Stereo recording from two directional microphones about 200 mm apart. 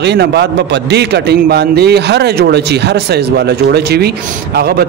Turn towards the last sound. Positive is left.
turn(degrees=-50)  # may be behind; listen again after turning